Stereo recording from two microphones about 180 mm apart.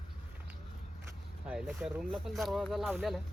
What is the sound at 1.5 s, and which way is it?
Speech, 5° right (ahead or behind).